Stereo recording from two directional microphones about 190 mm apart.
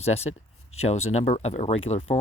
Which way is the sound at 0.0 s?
35° left (ahead or behind).